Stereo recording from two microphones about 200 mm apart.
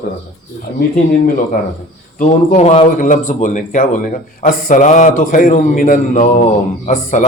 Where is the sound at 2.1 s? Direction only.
35° left (ahead or behind).